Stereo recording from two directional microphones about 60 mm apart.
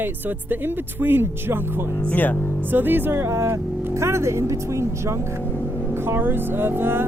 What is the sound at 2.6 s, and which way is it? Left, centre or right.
Speech, right.